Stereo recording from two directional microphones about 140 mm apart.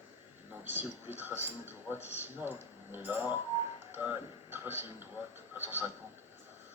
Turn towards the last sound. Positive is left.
turn(degrees=-15)  # may be behind; listen again after turning